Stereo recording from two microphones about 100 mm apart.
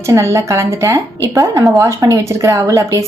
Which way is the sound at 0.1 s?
25° right (ahead or behind).